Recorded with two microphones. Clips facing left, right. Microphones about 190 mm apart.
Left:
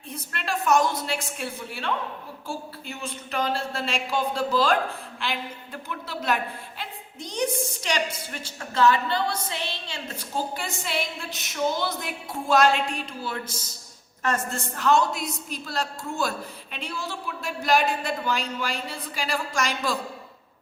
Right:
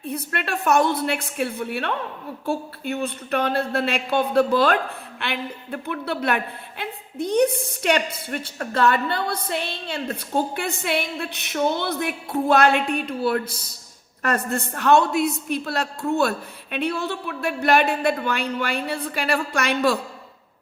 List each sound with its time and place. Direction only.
0.0 s speech: 60° right (ahead or behind)